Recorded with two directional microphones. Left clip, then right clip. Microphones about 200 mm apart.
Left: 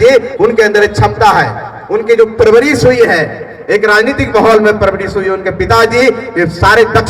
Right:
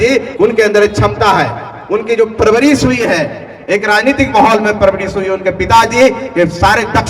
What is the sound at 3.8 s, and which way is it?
A man's voice, 35° right (ahead or behind).